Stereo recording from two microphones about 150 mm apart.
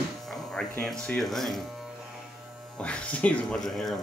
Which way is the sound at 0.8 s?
5° left (ahead or behind).